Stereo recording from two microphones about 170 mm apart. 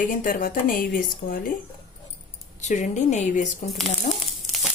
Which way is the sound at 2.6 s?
45° left (ahead or behind).